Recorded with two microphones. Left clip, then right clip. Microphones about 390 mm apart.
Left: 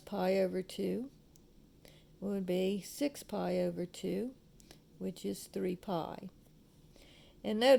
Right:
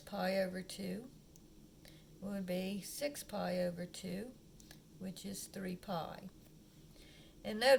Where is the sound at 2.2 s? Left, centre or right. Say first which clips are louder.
Left 7 dB; centre.